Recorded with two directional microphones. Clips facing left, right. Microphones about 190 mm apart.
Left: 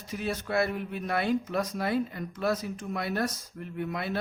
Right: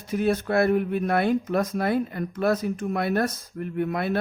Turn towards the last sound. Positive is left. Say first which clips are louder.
# right 7 dB
turn(degrees=-55)  # may be behind; listen again after turning